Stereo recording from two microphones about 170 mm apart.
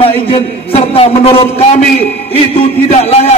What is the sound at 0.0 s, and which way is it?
A man's voice, 35° left (ahead or behind).